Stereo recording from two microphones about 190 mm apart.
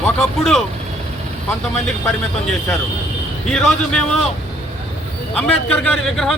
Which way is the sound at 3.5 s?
5° left (ahead or behind).